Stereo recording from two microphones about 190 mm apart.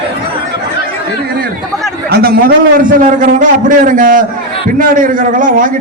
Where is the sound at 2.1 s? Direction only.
55° right (ahead or behind).